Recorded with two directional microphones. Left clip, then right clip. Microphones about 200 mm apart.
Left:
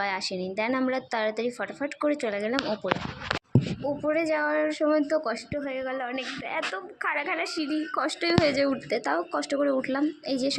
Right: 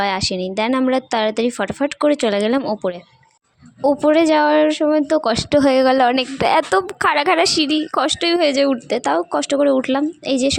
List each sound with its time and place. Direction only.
0.0 s a woman's voice: 50° right (ahead or behind); by 7.8 s 80° right
7.9 s speech: 50° right (ahead or behind)